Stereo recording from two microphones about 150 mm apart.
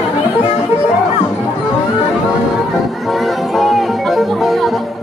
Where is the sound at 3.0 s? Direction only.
Centre (ahead or behind).